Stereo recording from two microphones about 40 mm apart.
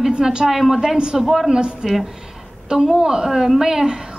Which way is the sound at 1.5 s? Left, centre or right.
Right.